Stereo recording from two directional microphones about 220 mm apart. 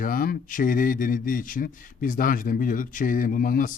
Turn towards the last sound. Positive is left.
turn(degrees=40)  # may be behind; listen again after turning